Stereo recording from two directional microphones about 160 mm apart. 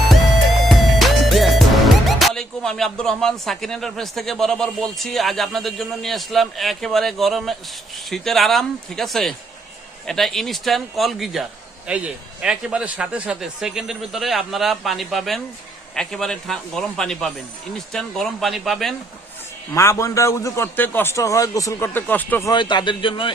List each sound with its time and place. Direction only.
0.7 s music: centre (ahead or behind)
2.0 s speech: centre (ahead or behind)
19.7 s a man's voice: 20° left (ahead or behind)
22.4 s a man's voice: 30° left (ahead or behind)